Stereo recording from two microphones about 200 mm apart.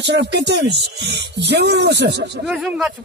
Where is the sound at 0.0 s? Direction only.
60° right (ahead or behind).